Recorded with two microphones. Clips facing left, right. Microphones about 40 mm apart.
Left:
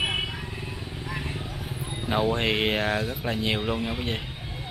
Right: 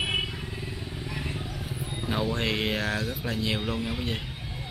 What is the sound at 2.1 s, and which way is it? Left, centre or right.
Speech, left.